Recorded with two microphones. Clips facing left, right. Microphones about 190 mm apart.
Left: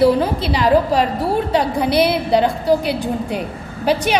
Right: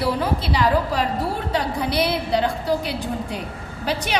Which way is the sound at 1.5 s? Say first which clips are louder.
Left 5 dB; 70° left (ahead or behind).